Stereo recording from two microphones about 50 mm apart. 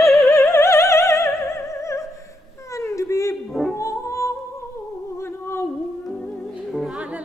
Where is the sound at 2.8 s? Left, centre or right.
Left.